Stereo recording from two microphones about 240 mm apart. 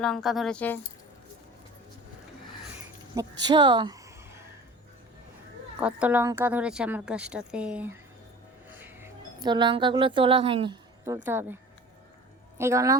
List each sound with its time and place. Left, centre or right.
0.0 s a woman's voice: centre
3.2 s a woman's voice: centre
5.8 s a woman's voice: centre
12.5 s a woman's voice: centre